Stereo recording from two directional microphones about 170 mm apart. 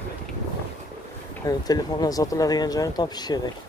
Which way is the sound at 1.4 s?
20° left (ahead or behind).